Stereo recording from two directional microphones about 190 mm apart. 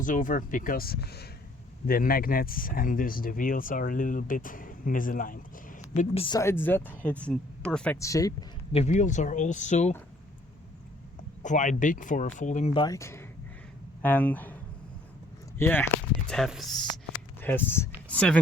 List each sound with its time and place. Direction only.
0.0 s speech: 45° left (ahead or behind)
6.0 s speech: 30° left (ahead or behind)
6.4 s speech: 10° left (ahead or behind)
7.9 s speech: 15° left (ahead or behind)
8.7 s speech: 35° left (ahead or behind)
11.4 s speech: 40° left (ahead or behind)
12.7 s speech: 20° left (ahead or behind); by 16.8 s centre (ahead or behind)
17.4 s speech: 10° left (ahead or behind)